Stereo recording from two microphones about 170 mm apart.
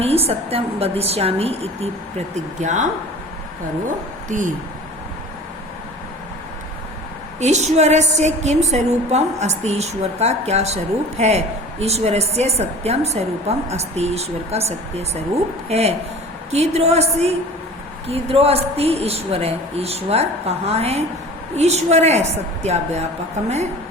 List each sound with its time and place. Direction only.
0.0 s a woman's voice: 35° right (ahead or behind)
4.3 s speech: 50° right (ahead or behind)
7.3 s a woman's voice: 40° right (ahead or behind)